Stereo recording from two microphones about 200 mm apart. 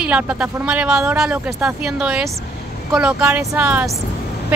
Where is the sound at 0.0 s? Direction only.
5° right (ahead or behind).